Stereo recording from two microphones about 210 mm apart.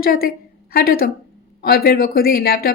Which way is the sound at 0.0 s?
45° left (ahead or behind).